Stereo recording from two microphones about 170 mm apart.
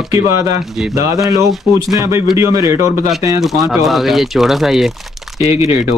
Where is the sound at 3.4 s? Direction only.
Centre (ahead or behind).